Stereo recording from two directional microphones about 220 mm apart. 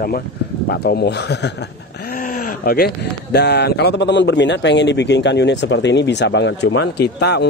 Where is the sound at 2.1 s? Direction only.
40° left (ahead or behind).